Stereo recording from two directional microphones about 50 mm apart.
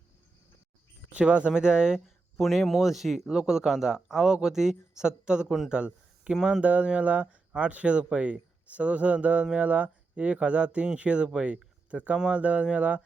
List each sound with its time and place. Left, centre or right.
1.2 s speech: right
2.0 s speech: centre
6.6 s speech: right